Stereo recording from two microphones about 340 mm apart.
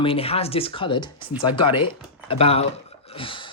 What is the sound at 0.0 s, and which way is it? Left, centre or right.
Speech, centre.